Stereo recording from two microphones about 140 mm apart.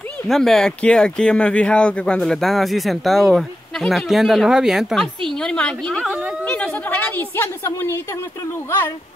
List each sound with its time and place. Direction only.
0.3 s speech: 5° left (ahead or behind)
6.0 s a woman's voice: 10° right (ahead or behind)
6.4 s a woman's voice: 10° left (ahead or behind)